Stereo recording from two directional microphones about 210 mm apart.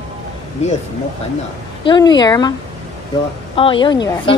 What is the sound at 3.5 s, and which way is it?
Speech, 25° left (ahead or behind).